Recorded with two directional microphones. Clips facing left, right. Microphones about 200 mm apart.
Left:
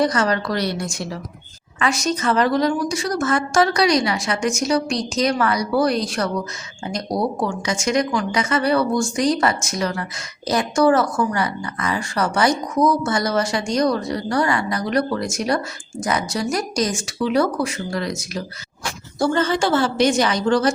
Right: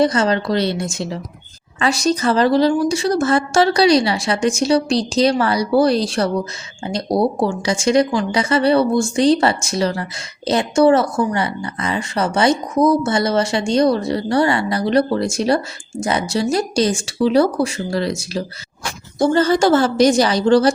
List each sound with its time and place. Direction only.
0.0 s a woman's voice: 25° right (ahead or behind)